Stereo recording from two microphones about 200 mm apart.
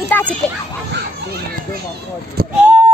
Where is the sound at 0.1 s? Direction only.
10° left (ahead or behind).